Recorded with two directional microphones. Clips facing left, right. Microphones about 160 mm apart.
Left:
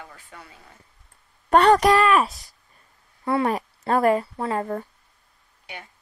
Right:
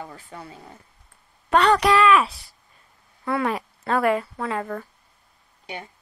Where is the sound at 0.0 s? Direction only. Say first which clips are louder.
Right 6 dB; 35° right (ahead or behind).